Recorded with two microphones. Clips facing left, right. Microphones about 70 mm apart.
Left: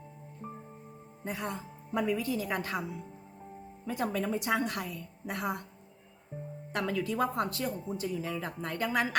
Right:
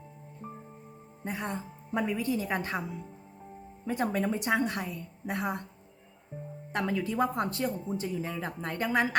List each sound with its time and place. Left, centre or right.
1.2 s a woman's voice: right
3.8 s a woman's voice: right
6.7 s a woman's voice: right